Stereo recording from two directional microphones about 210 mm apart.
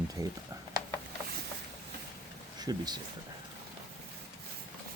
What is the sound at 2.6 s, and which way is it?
Speech, 20° right (ahead or behind).